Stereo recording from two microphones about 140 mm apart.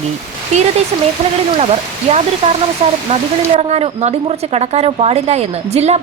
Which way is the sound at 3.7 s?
50° right (ahead or behind).